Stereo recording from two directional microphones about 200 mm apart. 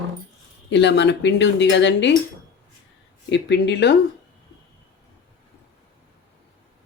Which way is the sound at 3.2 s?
60° left (ahead or behind).